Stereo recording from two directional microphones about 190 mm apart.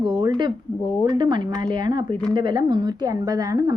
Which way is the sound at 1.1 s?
25° right (ahead or behind).